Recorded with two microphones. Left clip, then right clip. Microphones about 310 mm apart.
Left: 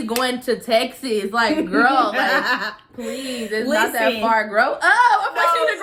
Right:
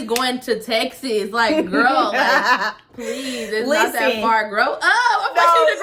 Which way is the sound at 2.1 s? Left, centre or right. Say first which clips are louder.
Right 3 dB; centre.